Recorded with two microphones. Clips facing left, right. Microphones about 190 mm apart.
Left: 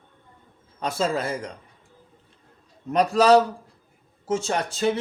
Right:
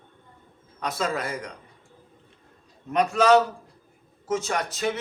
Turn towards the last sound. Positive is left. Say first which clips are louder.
# left 3 dB
turn(degrees=30)  # may be behind; listen again after turning